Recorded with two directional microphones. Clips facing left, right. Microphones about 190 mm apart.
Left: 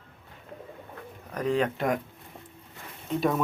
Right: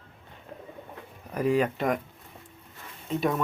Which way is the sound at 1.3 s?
10° right (ahead or behind).